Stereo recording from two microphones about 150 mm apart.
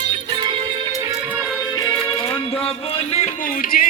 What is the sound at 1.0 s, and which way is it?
Music, 20° right (ahead or behind).